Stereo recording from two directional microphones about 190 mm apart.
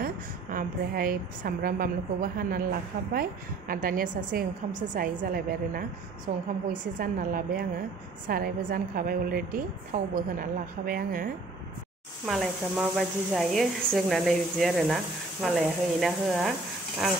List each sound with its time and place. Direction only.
0.0 s a woman's voice: 50° right (ahead or behind)
12.3 s speech: centre (ahead or behind)